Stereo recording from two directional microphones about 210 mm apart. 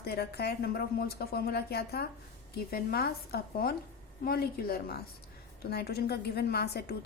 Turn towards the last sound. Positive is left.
turn(degrees=50)  # may be behind; listen again after turning